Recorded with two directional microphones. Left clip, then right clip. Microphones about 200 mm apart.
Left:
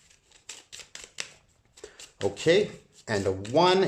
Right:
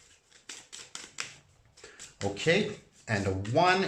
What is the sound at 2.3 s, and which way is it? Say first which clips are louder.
Speech: left 4 dB; 25° left (ahead or behind).